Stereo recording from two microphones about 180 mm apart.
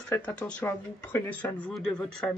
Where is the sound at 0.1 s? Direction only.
10° left (ahead or behind).